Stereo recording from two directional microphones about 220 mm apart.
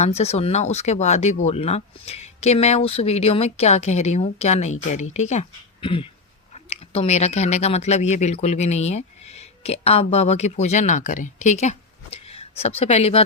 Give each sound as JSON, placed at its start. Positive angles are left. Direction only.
{"t": 0.0, "sound": "speech", "side_deg": 30}